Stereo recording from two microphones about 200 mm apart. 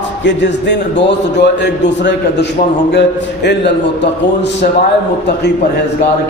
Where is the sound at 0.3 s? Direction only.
60° left (ahead or behind).